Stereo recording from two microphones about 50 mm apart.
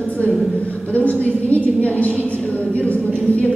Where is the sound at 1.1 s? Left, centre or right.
Left.